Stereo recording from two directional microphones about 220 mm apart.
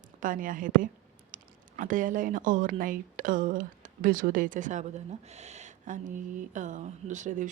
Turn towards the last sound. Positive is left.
turn(degrees=-35)  # may be behind; listen again after turning